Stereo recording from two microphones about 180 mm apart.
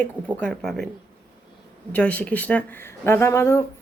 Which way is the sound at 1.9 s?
10° left (ahead or behind).